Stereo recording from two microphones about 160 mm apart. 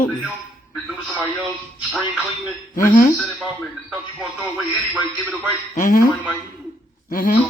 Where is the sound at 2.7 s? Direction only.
60° left (ahead or behind).